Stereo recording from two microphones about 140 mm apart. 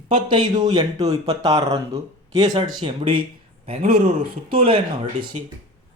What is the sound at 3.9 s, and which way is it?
Speech, 90° right.